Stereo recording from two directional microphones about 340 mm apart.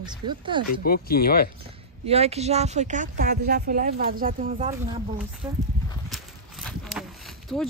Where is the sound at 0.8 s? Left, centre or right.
Left.